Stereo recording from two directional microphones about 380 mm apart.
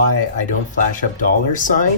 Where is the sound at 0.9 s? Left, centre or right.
Left.